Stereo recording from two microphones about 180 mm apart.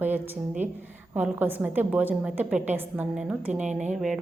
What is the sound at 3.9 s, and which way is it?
Speech, centre (ahead or behind).